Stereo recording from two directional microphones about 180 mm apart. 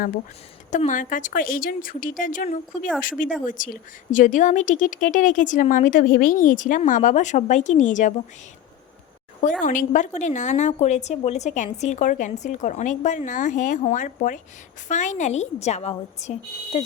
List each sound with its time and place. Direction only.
0.7 s a woman's voice: 45° left (ahead or behind)
9.6 s a woman's voice: 45° left (ahead or behind)